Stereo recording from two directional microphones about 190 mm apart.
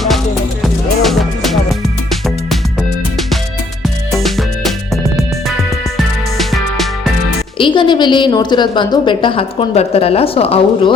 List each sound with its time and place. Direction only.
0.6 s music: centre (ahead or behind)
3.8 s music: centre (ahead or behind)
6.3 s music: centre (ahead or behind)
7.6 s a woman's voice: 25° left (ahead or behind)